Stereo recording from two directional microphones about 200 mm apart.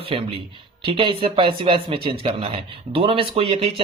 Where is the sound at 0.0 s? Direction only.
30° right (ahead or behind).